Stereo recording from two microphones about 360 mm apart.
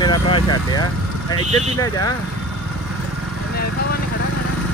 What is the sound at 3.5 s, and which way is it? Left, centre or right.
Vehicle, left.